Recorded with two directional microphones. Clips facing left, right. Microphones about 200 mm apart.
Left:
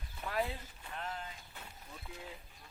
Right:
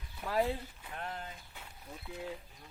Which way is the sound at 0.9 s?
45° right (ahead or behind).